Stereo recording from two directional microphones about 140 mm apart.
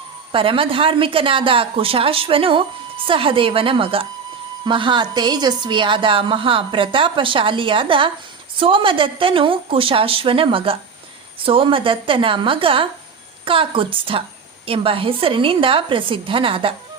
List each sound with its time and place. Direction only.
0.3 s a woman's voice: 40° right (ahead or behind)